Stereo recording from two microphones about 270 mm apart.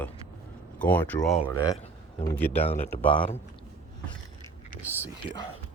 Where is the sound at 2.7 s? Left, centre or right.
Left.